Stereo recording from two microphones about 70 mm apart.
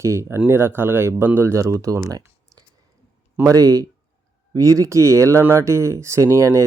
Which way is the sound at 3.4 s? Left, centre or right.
Right.